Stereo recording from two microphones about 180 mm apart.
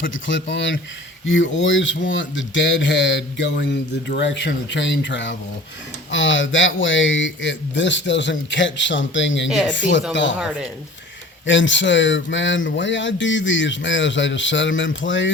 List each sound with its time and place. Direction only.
0.3 s speech: 85° left
10.3 s speech: 5° right (ahead or behind)
11.4 s speech: 90° left